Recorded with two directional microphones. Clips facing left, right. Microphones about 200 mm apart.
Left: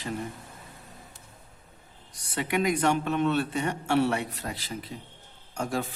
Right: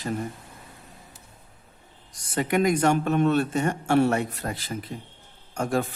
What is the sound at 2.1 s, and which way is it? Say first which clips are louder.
A man's voice: right 4 dB; 45° right (ahead or behind).